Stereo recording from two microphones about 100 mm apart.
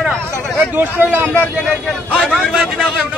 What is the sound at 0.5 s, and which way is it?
Speech, 20° right (ahead or behind).